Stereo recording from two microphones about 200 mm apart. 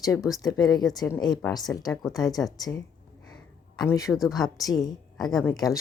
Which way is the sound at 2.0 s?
Centre (ahead or behind).